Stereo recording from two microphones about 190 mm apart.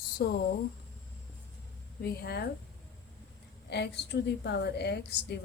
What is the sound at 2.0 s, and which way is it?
Speech, 60° left (ahead or behind).